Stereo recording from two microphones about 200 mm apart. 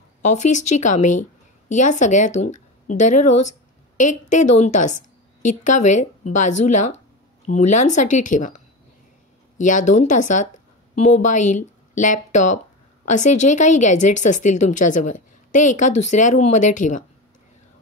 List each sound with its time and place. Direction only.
0.2 s speech: 35° left (ahead or behind)